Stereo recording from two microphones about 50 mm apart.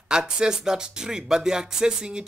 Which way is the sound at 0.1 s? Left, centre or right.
Centre.